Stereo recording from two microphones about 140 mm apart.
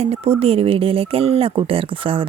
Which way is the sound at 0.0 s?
50° right (ahead or behind).